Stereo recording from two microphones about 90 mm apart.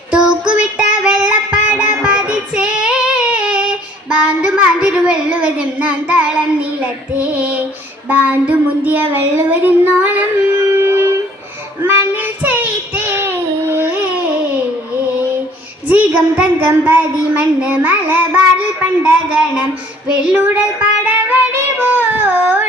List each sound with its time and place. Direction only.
0.1 s music: 10° right (ahead or behind)
4.1 s a sound: 10° right (ahead or behind)
8.0 s child singing: 20° right (ahead or behind)
10.7 s music: 25° right (ahead or behind)
11.8 s child singing: 25° right (ahead or behind)
15.9 s a sound: 15° right (ahead or behind)
20.4 s child singing: 15° right (ahead or behind)